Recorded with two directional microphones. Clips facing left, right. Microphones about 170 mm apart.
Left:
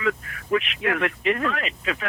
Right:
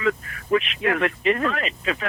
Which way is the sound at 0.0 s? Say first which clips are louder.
Right 2 dB; 30° right (ahead or behind).